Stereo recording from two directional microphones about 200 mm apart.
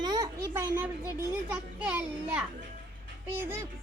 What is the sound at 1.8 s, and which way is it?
Speech, 5° right (ahead or behind).